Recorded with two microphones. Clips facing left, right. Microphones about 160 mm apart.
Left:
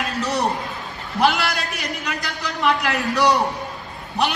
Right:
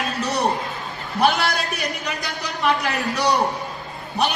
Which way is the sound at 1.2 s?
90° left.